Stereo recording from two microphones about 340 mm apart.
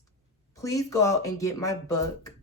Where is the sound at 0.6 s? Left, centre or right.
Centre.